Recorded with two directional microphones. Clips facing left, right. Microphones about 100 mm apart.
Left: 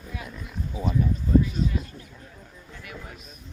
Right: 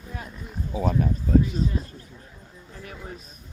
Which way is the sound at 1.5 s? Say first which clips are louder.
Right 1 dB; 35° right (ahead or behind).